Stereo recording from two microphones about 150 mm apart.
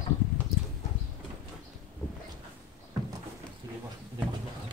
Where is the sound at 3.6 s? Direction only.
25° right (ahead or behind).